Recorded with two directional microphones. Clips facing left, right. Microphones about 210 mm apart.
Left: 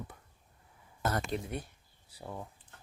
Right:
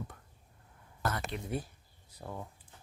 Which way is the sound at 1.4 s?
Centre (ahead or behind).